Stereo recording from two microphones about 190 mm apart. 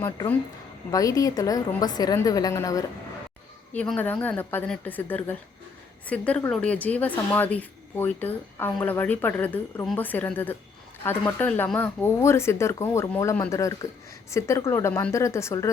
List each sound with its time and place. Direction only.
0.0 s a woman's voice: 15° left (ahead or behind)